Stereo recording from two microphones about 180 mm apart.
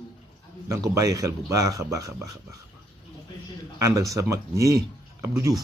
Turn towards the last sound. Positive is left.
turn(degrees=-15)  # may be behind; listen again after turning